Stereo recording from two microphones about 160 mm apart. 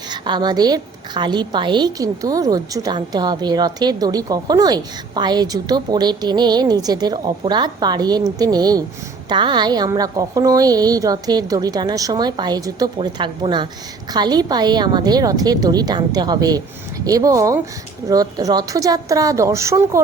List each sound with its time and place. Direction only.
0.1 s a woman's voice: 25° right (ahead or behind)